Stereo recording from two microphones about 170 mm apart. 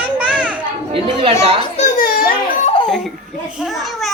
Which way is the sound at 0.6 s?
30° right (ahead or behind).